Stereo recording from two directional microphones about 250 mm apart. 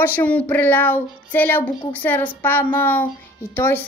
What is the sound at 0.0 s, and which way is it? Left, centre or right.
A woman's voice, centre.